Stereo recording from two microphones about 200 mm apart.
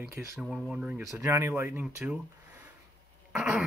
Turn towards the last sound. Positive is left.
turn(degrees=-5)  # may be behind; listen again after turning